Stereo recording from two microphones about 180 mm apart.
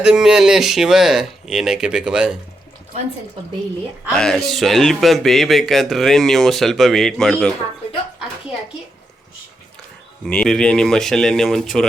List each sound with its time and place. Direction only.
0.0 s speech: 5° right (ahead or behind)
4.1 s speech: 5° left (ahead or behind)
10.2 s speech: 5° left (ahead or behind)